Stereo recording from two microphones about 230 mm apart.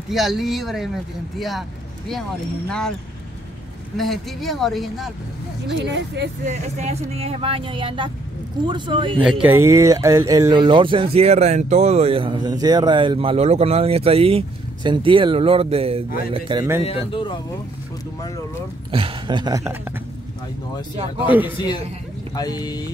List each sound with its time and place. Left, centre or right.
0.1 s speech: centre
3.9 s speech: centre
5.8 s speech: right
6.4 s speech: right
9.2 s speech: centre; by 16.6 s right
16.8 s speech: left
18.9 s speech: right
21.3 s a man's voice: centre
21.5 s speech: centre